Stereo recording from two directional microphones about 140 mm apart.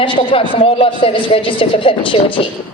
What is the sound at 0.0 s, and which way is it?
A woman's voice, 35° left (ahead or behind).